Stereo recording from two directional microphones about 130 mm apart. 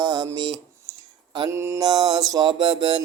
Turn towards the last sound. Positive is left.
turn(degrees=-40)  # may be behind; listen again after turning